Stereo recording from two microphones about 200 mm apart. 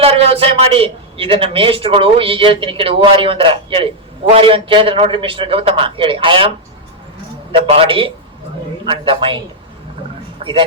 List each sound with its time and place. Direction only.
0.0 s a man's voice: 30° right (ahead or behind)
7.5 s a man's voice: 30° right (ahead or behind)
10.4 s speech: 30° right (ahead or behind)